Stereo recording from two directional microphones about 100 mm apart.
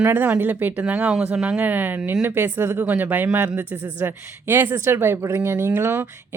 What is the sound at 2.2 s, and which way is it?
Speech, 25° right (ahead or behind).